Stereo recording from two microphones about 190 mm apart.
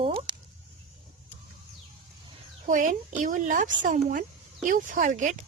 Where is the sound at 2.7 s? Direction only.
40° right (ahead or behind).